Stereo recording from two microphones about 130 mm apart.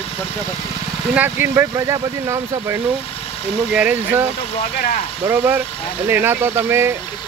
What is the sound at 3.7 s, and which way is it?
Speech, 10° right (ahead or behind).